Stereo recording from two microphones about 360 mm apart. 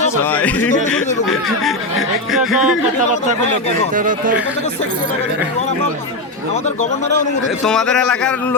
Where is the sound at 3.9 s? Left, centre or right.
Right.